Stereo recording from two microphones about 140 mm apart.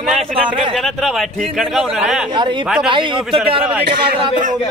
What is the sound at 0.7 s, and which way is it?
Speech, centre (ahead or behind).